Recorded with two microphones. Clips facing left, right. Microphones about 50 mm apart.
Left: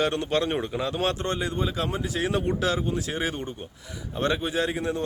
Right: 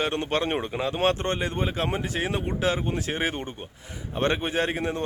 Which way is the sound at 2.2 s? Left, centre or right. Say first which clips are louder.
Left 3 dB; centre.